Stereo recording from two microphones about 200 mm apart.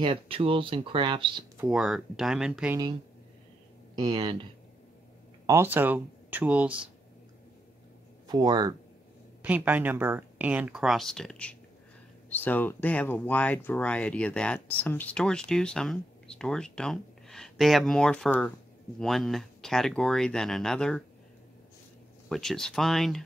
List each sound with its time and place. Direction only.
0.0 s speech: 25° right (ahead or behind)
1.6 s speech: 5° right (ahead or behind)
3.9 s speech: 20° right (ahead or behind)
5.5 s speech: 10° right (ahead or behind)
8.3 s speech: 20° right (ahead or behind)
9.4 s speech: 10° right (ahead or behind)
22.3 s speech: centre (ahead or behind)